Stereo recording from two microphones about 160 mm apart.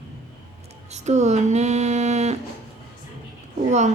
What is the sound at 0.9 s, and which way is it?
Speech, 45° right (ahead or behind).